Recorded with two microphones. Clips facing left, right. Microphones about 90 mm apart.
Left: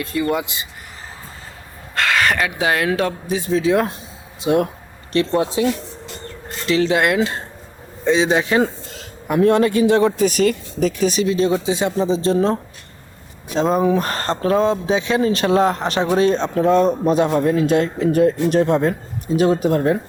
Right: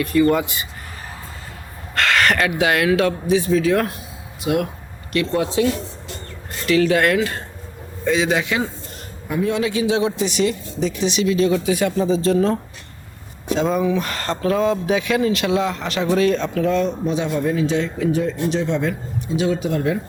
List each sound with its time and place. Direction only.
0.2 s speech: 15° left (ahead or behind)
2.0 s crow: 15° left (ahead or behind)
2.6 s speech: 30° left (ahead or behind)
3.5 s speech: 20° left (ahead or behind)
4.4 s speech: 35° left (ahead or behind)
6.7 s speech: 25° left (ahead or behind)
9.0 s a man's voice: 65° left (ahead or behind); by 12.5 s 30° left (ahead or behind)
13.7 s a man's voice: 40° left (ahead or behind)